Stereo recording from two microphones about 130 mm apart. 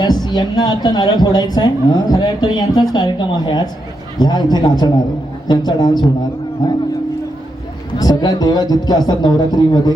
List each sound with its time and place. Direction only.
0.0 s speech: 35° left (ahead or behind)
7.9 s speech: 30° left (ahead or behind)